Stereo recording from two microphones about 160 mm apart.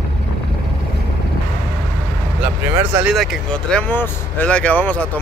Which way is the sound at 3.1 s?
5° left (ahead or behind).